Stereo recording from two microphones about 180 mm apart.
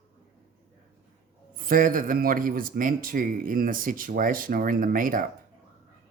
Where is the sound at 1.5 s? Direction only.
50° right (ahead or behind).